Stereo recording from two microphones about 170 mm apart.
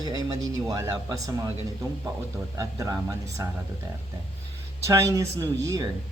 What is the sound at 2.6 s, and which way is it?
Speech, 20° right (ahead or behind).